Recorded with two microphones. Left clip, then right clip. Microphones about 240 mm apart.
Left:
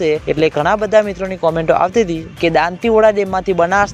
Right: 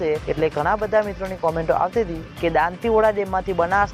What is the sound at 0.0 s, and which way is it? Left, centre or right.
Speech, left.